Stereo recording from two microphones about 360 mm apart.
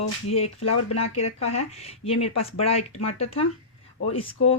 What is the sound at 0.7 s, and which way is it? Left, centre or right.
Speech, left.